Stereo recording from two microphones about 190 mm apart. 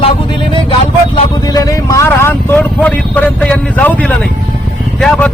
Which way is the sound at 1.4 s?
20° left (ahead or behind).